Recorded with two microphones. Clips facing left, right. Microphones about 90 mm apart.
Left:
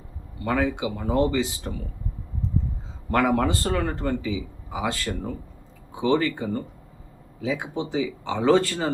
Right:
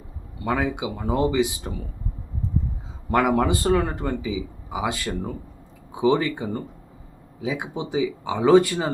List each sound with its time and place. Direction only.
0.4 s speech: 15° right (ahead or behind)
3.1 s speech: 15° right (ahead or behind)